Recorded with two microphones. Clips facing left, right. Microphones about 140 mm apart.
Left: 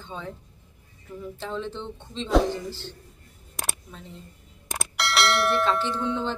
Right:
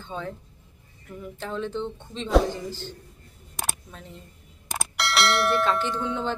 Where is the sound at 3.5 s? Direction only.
Centre (ahead or behind).